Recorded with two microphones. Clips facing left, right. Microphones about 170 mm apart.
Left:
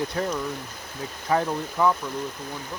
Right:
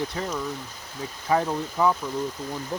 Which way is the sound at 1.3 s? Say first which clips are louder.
Even; 10° right (ahead or behind).